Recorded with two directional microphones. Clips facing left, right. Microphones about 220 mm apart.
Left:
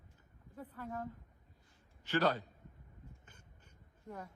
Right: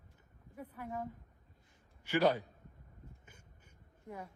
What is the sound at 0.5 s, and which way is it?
A man's voice, 10° right (ahead or behind).